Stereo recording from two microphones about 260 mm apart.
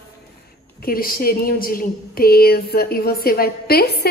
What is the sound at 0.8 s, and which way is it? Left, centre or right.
A woman's voice, left.